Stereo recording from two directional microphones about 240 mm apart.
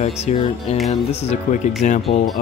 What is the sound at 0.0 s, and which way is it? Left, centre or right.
Speech, left.